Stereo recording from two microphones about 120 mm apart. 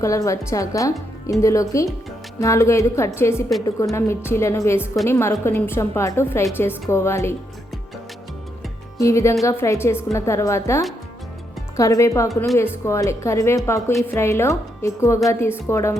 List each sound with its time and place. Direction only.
0.0 s a woman's voice: 25° left (ahead or behind)
9.0 s a woman's voice: 25° left (ahead or behind)